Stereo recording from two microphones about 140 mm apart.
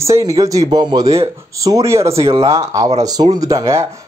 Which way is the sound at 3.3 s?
25° right (ahead or behind).